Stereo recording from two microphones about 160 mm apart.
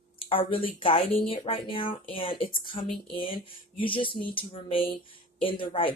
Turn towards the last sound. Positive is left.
turn(degrees=35)  # may be behind; listen again after turning